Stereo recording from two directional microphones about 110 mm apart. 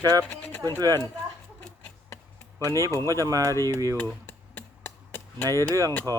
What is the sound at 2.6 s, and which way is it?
Speech, 30° right (ahead or behind).